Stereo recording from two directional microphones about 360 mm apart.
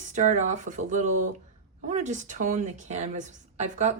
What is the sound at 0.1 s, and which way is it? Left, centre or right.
Speech, centre.